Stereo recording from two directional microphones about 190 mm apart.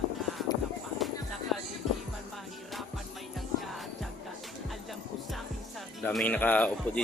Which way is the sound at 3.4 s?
Centre (ahead or behind).